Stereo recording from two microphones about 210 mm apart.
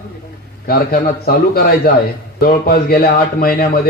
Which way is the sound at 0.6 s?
45° left (ahead or behind).